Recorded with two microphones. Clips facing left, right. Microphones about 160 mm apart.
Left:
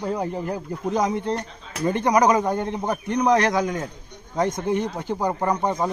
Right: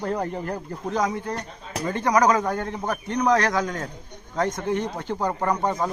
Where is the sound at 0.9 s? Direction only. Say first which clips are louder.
Left 3 dB; 20° left (ahead or behind).